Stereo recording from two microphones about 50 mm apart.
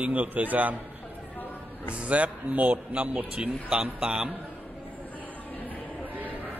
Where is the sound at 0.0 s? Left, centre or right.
Right.